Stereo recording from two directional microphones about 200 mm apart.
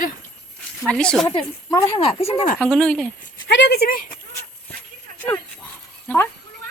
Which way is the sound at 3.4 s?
60° left (ahead or behind).